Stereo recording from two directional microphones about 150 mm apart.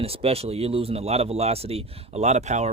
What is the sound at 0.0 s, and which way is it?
Speech, 40° right (ahead or behind).